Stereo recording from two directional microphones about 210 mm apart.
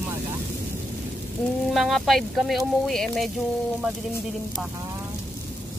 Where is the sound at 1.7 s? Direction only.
Centre (ahead or behind).